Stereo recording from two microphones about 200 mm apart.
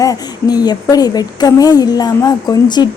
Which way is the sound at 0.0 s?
20° left (ahead or behind).